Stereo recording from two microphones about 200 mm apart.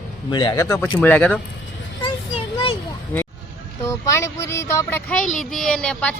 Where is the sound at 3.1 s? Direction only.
10° left (ahead or behind).